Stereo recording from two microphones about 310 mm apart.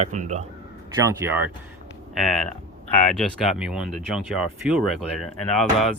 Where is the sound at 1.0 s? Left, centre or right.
Centre.